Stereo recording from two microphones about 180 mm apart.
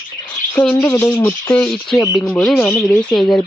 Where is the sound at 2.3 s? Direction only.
5° left (ahead or behind).